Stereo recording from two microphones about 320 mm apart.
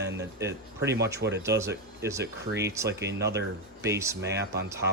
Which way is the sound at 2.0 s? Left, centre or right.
Centre.